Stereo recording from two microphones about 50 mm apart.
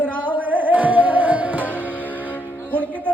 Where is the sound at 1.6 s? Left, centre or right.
Left.